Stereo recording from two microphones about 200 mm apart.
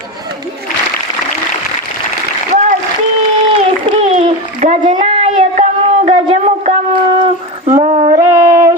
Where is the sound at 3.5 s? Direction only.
30° right (ahead or behind).